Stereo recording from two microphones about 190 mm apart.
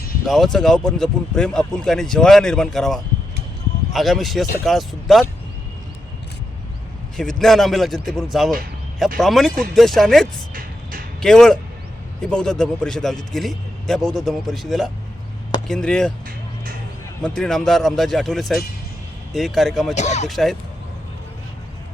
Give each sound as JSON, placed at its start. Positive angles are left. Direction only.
{"t": 0.3, "sound": "a man's voice", "side_deg": 0}
{"t": 7.2, "sound": "a man's voice", "side_deg": 0}
{"t": 10.5, "sound": "vehicle", "side_deg": -50}
{"t": 11.2, "sound": "a man's voice", "side_deg": 5}
{"t": 17.2, "sound": "a man's voice", "side_deg": 5}
{"t": 19.9, "sound": "speech", "side_deg": 35}
{"t": 20.2, "sound": "a man's voice", "side_deg": 0}